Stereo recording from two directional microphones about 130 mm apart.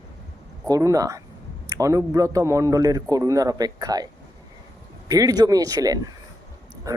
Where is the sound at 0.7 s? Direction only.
25° right (ahead or behind).